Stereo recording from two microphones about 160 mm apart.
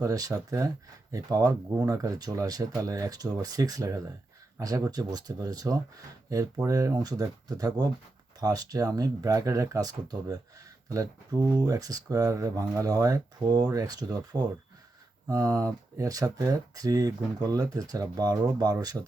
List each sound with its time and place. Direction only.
0.0 s speech: 20° right (ahead or behind)